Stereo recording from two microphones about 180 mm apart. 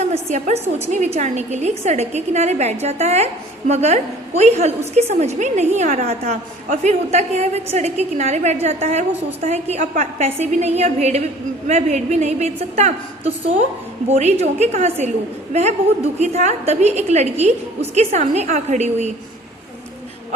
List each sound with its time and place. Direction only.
0.1 s a woman's voice: 40° right (ahead or behind)
16.1 s a woman's voice: 40° right (ahead or behind)